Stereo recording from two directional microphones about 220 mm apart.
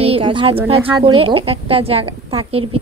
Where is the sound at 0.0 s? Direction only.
25° right (ahead or behind).